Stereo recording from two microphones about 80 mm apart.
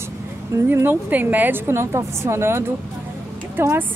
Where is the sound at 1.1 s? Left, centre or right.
Right.